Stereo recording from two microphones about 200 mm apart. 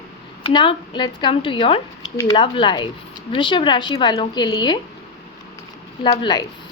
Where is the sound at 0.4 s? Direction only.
25° left (ahead or behind).